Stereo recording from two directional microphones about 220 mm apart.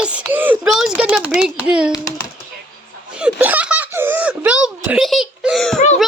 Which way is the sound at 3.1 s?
5° right (ahead or behind).